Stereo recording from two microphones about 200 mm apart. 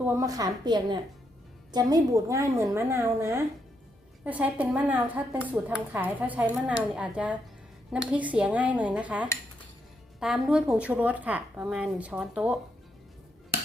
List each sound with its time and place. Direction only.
0.0 s a woman's voice: 15° right (ahead or behind)